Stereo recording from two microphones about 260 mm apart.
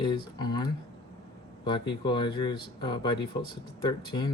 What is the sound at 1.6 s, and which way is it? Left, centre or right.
Speech, centre.